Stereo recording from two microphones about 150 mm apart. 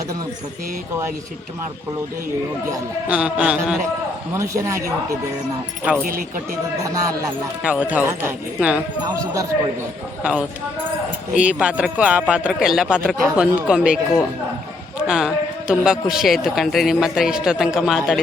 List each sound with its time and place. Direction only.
3.1 s speech: 10° right (ahead or behind)
4.4 s speech: 20° right (ahead or behind)
6.1 s speech: 70° right (ahead or behind)
6.8 s speech: 20° right (ahead or behind)
7.6 s speech: 10° right (ahead or behind)
11.3 s speech: 5° right (ahead or behind)